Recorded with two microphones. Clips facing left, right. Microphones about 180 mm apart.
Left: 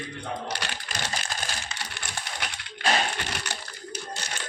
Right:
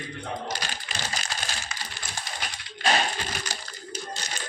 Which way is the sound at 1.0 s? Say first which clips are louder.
Left 1 dB; 60° left (ahead or behind).